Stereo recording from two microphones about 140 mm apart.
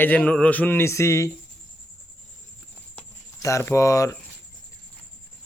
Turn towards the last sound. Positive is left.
turn(degrees=25)  # may be behind; listen again after turning